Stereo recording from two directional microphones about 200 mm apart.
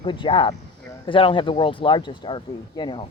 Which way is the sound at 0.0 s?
25° left (ahead or behind).